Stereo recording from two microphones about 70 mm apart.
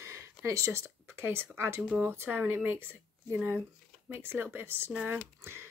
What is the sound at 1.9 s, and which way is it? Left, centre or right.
Speech, right.